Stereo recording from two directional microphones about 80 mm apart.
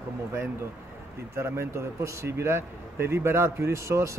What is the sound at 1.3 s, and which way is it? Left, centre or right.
A man's voice, right.